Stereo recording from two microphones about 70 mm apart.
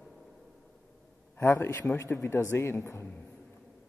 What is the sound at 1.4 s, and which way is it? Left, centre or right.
A woman's voice, left.